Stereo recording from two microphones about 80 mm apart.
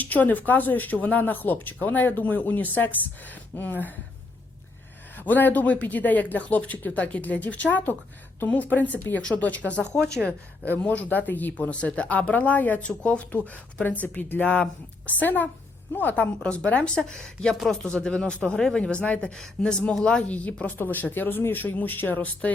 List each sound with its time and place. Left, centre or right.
0.0 s speech: left
5.1 s a woman's voice: left